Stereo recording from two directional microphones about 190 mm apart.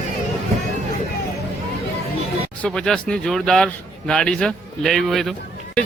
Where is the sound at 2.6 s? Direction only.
Centre (ahead or behind).